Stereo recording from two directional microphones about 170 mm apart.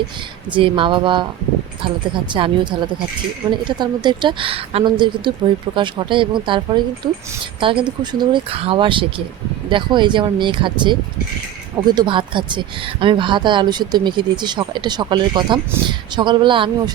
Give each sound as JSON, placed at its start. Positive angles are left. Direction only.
{"t": 0.5, "sound": "speech", "side_deg": -30}